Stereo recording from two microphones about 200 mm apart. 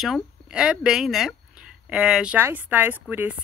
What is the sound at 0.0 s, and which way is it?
Speech, 5° right (ahead or behind).